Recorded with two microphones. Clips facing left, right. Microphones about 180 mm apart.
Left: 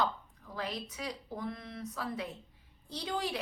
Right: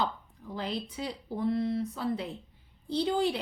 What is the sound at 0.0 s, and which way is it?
A woman's voice, 30° right (ahead or behind).